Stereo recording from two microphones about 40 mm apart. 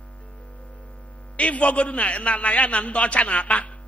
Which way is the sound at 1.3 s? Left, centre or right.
Left.